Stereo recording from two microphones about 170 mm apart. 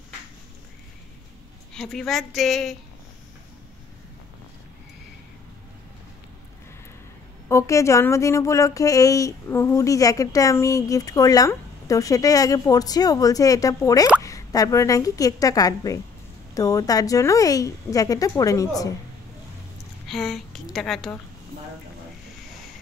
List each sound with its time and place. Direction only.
1.8 s a woman's voice: 5° left (ahead or behind)
7.4 s speech: 15° left (ahead or behind)
20.1 s a woman's voice: centre (ahead or behind)